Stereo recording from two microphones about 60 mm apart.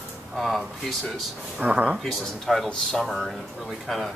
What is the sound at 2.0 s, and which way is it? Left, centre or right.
Speech, centre.